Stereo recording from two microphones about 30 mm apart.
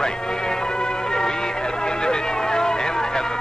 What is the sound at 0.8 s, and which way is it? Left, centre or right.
Music, left.